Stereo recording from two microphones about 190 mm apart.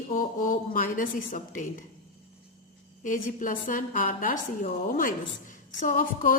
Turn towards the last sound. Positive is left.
turn(degrees=45)  # may be behind; listen again after turning